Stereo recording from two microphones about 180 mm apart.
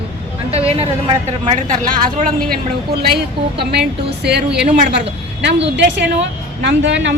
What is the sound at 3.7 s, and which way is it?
Speech, 65° right (ahead or behind).